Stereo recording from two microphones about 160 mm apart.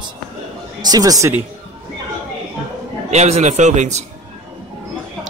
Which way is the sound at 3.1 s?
45° right (ahead or behind).